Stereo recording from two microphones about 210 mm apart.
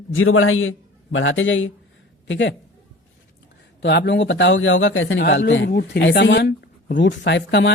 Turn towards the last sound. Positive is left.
turn(degrees=55)  # may be behind; listen again after turning